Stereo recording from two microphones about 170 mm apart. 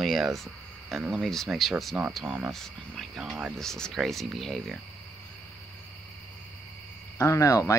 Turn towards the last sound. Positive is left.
turn(degrees=20)  # may be behind; listen again after turning